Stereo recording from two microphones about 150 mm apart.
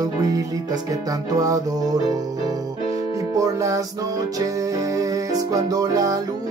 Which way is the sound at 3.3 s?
20° right (ahead or behind).